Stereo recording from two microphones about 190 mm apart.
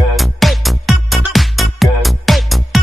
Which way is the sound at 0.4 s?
Centre (ahead or behind).